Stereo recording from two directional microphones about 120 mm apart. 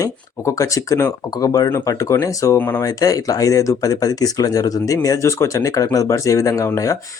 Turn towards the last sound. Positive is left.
turn(degrees=25)  # may be behind; listen again after turning